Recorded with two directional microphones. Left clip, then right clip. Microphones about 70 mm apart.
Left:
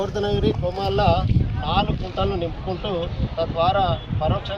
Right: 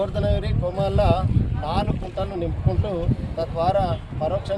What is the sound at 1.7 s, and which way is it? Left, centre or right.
Speech, right.